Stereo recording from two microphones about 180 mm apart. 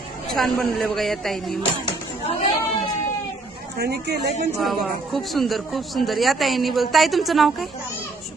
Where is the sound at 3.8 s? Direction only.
65° right (ahead or behind).